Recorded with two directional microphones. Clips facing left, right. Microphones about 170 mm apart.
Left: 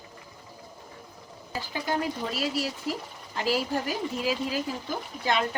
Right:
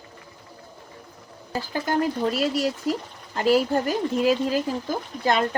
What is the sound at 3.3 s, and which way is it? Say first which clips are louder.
Speech: right 7 dB; 45° right (ahead or behind).